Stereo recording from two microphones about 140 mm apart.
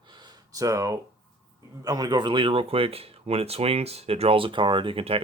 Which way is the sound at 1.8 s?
25° right (ahead or behind).